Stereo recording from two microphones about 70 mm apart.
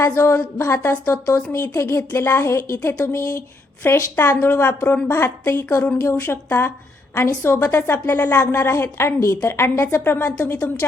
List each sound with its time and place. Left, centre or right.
0.0 s a woman's voice: left